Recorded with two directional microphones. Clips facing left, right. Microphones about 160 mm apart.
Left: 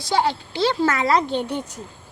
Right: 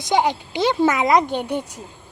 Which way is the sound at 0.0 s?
15° right (ahead or behind).